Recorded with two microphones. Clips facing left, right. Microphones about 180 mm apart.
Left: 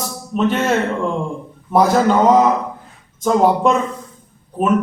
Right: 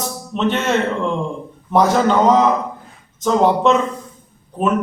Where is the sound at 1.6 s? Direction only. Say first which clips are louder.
Left 1 dB; 10° left (ahead or behind).